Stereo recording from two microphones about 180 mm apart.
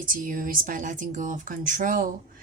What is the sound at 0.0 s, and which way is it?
Speech, 50° right (ahead or behind).